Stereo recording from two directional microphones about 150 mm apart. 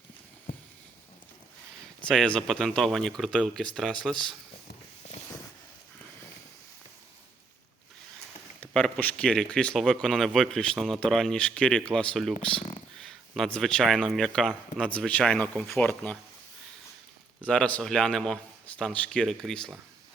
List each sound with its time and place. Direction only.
2.0 s speech: 5° left (ahead or behind)
5.0 s a sound: 50° left (ahead or behind)
8.6 s speech: 5° left (ahead or behind)
17.4 s speech: 5° left (ahead or behind)